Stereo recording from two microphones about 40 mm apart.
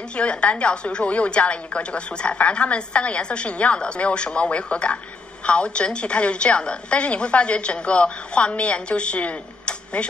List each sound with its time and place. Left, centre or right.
0.1 s a woman's voice: left